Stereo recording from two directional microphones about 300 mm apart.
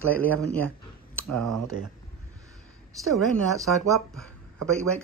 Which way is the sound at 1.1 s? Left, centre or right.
Centre.